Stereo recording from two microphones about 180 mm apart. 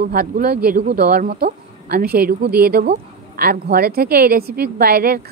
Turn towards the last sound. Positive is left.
turn(degrees=-55)  # may be behind; listen again after turning